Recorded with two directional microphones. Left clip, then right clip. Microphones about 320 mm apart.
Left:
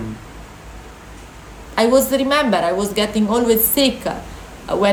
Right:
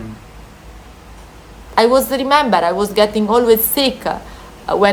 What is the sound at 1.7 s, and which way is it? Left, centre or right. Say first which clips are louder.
A woman's voice: right 2 dB; centre.